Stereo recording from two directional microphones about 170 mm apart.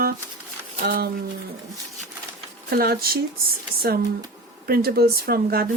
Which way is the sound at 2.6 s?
65° right (ahead or behind).